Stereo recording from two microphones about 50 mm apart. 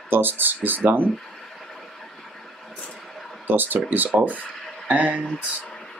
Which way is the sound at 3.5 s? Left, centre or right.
Right.